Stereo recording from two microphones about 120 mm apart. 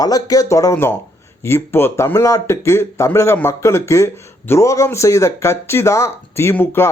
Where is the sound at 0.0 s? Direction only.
30° left (ahead or behind).